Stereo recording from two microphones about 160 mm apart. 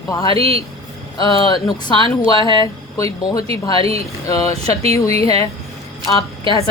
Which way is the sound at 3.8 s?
40° right (ahead or behind).